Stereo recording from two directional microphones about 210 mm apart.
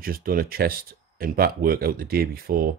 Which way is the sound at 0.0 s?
45° right (ahead or behind).